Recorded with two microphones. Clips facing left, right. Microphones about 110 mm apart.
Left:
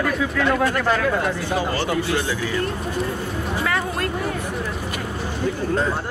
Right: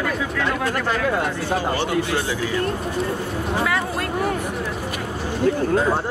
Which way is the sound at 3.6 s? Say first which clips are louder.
Even; 5° right (ahead or behind).